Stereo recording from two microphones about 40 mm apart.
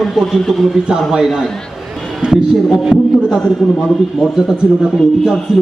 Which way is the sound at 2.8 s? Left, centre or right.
Centre.